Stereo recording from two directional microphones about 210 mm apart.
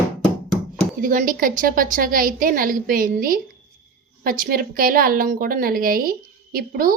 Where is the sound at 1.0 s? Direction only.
40° right (ahead or behind).